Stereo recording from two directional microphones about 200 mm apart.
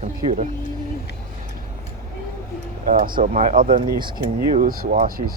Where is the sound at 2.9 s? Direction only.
45° right (ahead or behind).